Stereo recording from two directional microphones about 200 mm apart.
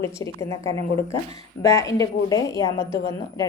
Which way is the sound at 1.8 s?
15° left (ahead or behind).